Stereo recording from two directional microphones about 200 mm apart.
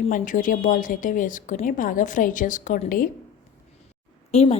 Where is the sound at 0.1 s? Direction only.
40° left (ahead or behind).